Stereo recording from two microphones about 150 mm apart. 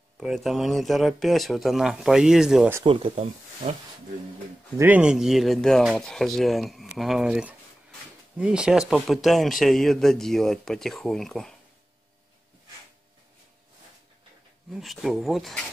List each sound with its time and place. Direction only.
0.2 s speech: centre (ahead or behind)
2.8 s speech: 35° right (ahead or behind)
4.7 s speech: 10° right (ahead or behind)
14.7 s speech: centre (ahead or behind)